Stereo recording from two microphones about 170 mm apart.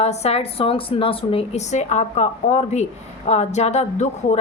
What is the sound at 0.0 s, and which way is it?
A woman's voice, 40° left (ahead or behind).